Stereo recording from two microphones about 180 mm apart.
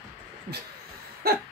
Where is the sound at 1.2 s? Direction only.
60° right (ahead or behind).